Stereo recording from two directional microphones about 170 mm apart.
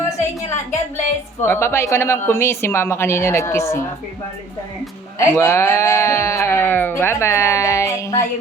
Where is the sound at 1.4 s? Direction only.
15° left (ahead or behind).